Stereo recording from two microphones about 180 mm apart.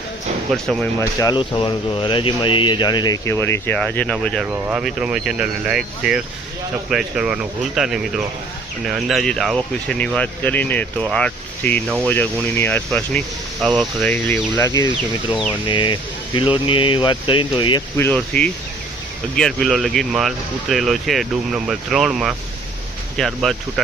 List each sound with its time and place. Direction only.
0.5 s speech: centre (ahead or behind)
0.9 s speech: 20° left (ahead or behind); by 4.4 s 5° left (ahead or behind)
4.4 s speech: 10° right (ahead or behind); by 17.8 s 25° left (ahead or behind)
17.9 s speech: 10° left (ahead or behind)